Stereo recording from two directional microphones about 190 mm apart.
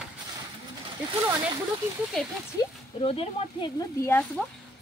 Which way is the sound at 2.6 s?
30° left (ahead or behind).